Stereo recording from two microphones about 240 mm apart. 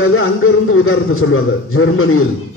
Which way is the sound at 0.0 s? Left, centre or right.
Left.